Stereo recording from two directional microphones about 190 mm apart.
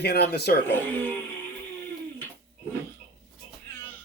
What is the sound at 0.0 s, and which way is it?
Speech, 60° left (ahead or behind).